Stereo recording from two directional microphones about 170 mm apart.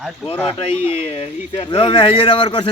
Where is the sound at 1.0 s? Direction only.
35° left (ahead or behind).